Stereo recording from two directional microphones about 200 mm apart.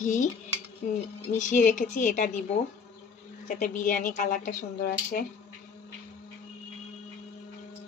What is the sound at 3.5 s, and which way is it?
Speech, 40° left (ahead or behind).